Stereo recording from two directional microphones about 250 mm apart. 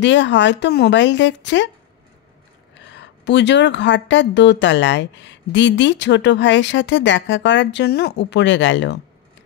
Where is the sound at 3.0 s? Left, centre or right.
Left.